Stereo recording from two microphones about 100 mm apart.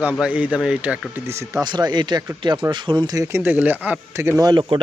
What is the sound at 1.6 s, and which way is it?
Speech, 45° right (ahead or behind).